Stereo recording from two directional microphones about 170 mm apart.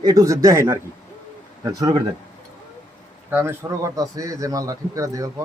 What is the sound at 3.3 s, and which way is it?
A man's voice, 15° right (ahead or behind).